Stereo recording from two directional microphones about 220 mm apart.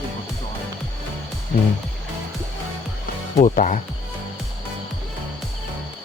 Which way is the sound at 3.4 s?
35° left (ahead or behind).